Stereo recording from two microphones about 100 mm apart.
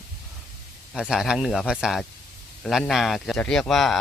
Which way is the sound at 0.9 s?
5° right (ahead or behind).